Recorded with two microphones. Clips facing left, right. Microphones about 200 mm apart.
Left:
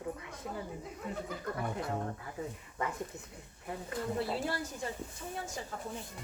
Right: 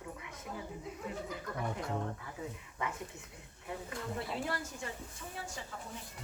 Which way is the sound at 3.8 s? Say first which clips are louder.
Left 7 dB; 35° left (ahead or behind).